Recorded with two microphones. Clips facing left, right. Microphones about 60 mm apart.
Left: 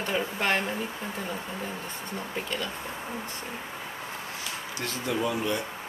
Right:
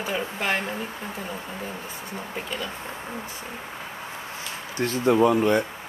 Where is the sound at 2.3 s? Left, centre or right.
Centre.